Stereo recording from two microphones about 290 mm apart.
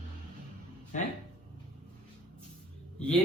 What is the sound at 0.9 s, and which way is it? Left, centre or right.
Speech, left.